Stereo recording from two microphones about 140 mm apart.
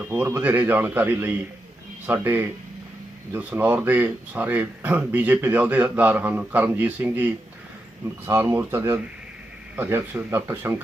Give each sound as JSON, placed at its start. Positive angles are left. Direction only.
{"t": 0.0, "sound": "speech", "side_deg": -15}